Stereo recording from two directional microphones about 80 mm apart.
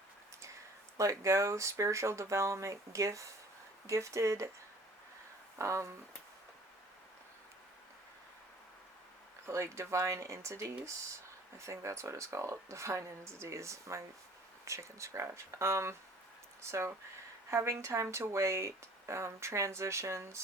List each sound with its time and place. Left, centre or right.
0.9 s speech: right
5.5 s speech: right
9.5 s speech: right
17.5 s speech: right